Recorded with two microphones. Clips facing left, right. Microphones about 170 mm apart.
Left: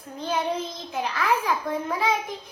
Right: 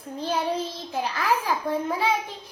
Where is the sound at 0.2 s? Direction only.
35° right (ahead or behind).